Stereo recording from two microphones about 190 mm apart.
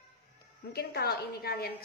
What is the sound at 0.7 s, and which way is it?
A woman's voice, 55° left (ahead or behind).